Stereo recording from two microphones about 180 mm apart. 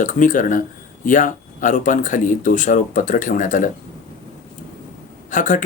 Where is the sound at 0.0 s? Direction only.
45° left (ahead or behind).